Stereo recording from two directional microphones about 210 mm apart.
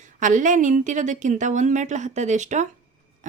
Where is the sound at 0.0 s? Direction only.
35° right (ahead or behind).